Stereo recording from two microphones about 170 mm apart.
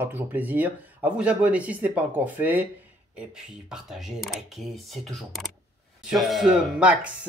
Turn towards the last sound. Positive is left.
turn(degrees=-5)  # may be behind; listen again after turning